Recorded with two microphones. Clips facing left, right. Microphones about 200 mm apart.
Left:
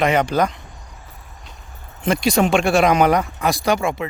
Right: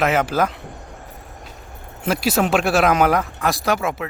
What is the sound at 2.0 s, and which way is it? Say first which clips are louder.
Speech: left 2 dB; 5° right (ahead or behind).